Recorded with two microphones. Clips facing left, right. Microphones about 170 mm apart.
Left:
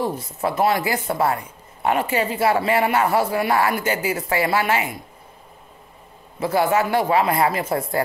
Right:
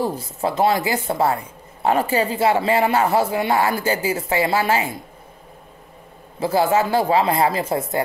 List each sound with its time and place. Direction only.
0.1 s speech: 30° right (ahead or behind)
6.4 s speech: 30° right (ahead or behind)